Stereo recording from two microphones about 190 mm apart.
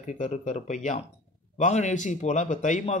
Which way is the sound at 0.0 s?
40° left (ahead or behind).